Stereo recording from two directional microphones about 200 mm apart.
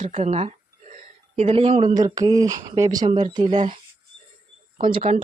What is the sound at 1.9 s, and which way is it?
Speech, 20° right (ahead or behind).